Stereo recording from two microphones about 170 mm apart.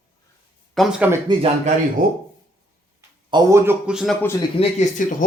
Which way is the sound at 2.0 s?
55° right (ahead or behind).